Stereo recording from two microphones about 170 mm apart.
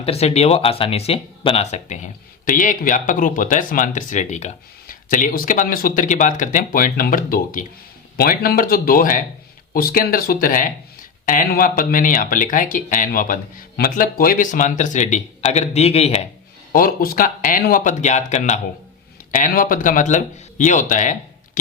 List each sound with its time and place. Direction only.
0.0 s speech: 35° left (ahead or behind)
2.4 s speech: 50° left (ahead or behind)
16.7 s speech: 60° left (ahead or behind); by 18.6 s 40° left (ahead or behind)
19.3 s speech: 55° left (ahead or behind)